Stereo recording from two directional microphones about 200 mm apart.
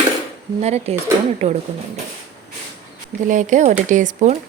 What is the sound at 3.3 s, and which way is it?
Speech, 40° right (ahead or behind).